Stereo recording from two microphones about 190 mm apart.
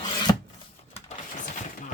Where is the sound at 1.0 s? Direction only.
40° left (ahead or behind).